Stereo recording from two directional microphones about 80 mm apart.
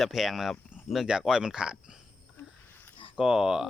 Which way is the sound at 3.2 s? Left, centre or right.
Centre.